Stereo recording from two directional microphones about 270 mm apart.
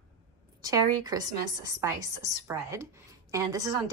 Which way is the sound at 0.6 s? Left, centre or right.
Centre.